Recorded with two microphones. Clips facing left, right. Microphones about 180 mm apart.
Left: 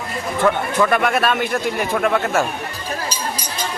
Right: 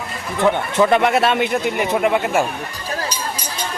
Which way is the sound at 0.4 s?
25° right (ahead or behind).